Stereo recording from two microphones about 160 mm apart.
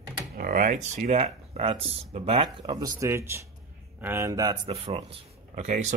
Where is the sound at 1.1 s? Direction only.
40° right (ahead or behind).